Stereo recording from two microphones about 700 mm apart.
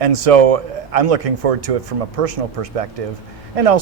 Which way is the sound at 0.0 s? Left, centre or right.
Right.